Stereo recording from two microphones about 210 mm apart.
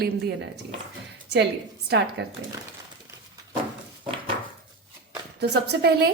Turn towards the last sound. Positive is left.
turn(degrees=-50)  # may be behind; listen again after turning